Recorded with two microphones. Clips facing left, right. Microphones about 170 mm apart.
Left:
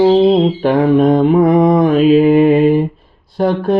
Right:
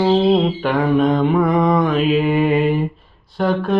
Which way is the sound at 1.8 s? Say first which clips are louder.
Left 7 dB; 45° left (ahead or behind).